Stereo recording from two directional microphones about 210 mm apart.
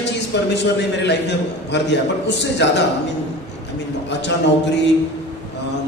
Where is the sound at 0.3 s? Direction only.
55° left (ahead or behind).